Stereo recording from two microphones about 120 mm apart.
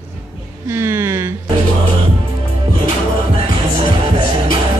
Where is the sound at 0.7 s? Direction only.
20° right (ahead or behind).